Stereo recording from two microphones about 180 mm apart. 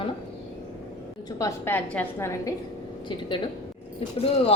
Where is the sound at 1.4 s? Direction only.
15° left (ahead or behind).